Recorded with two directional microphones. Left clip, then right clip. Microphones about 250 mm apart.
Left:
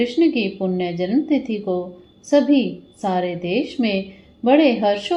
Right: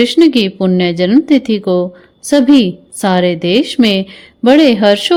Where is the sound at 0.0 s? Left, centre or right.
Right.